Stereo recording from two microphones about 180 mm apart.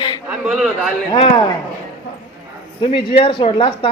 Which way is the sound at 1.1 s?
25° left (ahead or behind).